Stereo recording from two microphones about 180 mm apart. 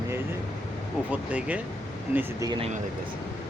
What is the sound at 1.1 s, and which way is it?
Speech, 5° right (ahead or behind).